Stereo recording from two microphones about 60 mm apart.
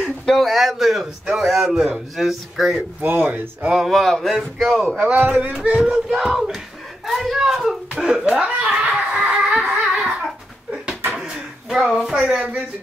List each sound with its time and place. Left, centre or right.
0.0 s speech: centre
3.0 s speech: right
3.6 s speech: centre
3.9 s speech: centre
4.9 s speech: right
5.6 s speech: centre
6.0 s speech: centre
8.6 s a sound: centre
12.1 s speech: centre